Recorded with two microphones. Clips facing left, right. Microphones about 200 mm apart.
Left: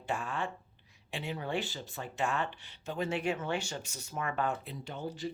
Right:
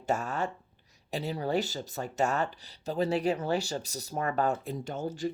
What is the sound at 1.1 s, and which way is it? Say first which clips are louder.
Speech: right 6 dB; 35° right (ahead or behind).